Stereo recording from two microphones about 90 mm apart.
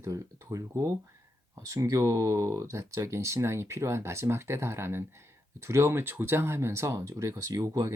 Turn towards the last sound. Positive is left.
turn(degrees=-40)  # may be behind; listen again after turning